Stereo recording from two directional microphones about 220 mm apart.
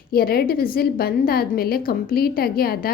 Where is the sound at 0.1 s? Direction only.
45° left (ahead or behind).